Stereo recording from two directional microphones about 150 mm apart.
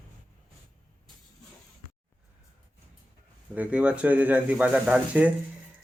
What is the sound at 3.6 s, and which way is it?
Speech, 10° right (ahead or behind).